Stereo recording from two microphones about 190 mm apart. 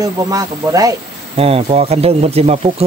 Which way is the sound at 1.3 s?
30° right (ahead or behind).